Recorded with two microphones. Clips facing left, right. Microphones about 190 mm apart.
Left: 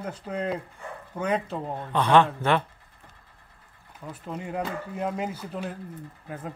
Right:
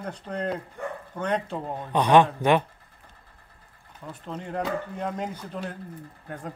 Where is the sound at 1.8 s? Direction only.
15° right (ahead or behind).